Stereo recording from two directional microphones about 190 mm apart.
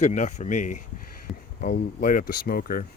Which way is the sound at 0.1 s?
40° left (ahead or behind).